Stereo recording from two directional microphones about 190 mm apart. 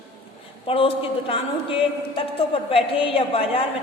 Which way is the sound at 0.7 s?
30° left (ahead or behind).